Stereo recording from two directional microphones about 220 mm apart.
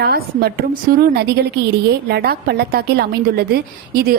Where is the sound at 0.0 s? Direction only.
45° right (ahead or behind).